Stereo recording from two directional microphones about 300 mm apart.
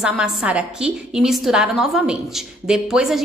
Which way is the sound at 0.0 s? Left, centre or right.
Centre.